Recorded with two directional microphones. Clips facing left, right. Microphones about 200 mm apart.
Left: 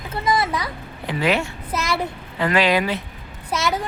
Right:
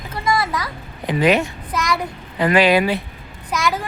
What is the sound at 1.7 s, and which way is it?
Child singing, 25° left (ahead or behind).